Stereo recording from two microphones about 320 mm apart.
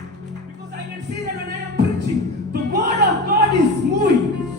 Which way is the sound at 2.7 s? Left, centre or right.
Right.